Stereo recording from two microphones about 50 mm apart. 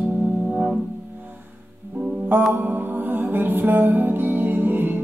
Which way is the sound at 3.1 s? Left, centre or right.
Right.